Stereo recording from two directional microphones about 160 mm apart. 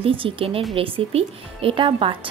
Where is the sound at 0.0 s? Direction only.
35° right (ahead or behind).